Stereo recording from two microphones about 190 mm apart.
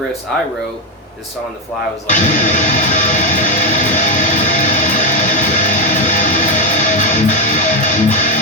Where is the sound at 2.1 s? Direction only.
40° left (ahead or behind).